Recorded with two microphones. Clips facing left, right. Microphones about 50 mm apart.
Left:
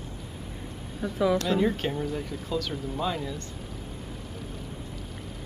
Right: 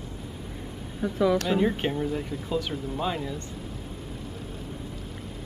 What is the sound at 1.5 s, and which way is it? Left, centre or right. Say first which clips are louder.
Speech: right 1 dB; centre.